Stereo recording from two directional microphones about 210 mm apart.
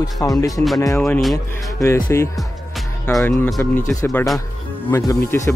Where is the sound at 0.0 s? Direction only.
15° left (ahead or behind).